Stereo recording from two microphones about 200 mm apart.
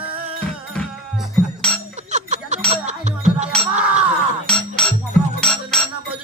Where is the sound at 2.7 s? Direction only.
35° right (ahead or behind).